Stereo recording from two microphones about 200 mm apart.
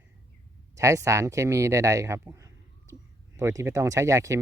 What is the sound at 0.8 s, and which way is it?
Speech, 15° right (ahead or behind).